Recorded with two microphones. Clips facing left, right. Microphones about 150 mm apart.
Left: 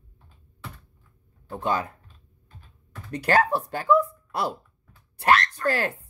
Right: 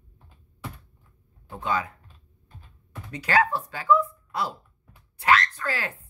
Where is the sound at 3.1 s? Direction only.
65° left (ahead or behind).